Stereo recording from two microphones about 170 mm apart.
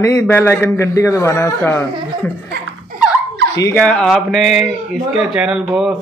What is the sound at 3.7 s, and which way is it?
Speech, 5° left (ahead or behind).